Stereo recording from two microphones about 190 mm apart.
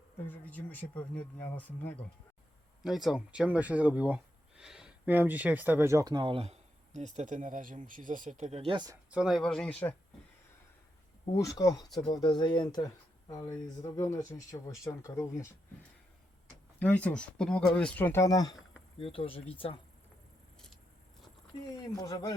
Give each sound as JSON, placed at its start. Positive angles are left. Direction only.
{"t": 0.3, "sound": "speech", "side_deg": 10}
{"t": 9.0, "sound": "speech", "side_deg": -5}
{"t": 11.3, "sound": "speech", "side_deg": 20}
{"t": 16.8, "sound": "speech", "side_deg": 5}
{"t": 21.7, "sound": "speech", "side_deg": 20}